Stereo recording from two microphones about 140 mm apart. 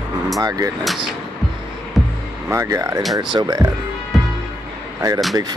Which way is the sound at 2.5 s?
20° right (ahead or behind).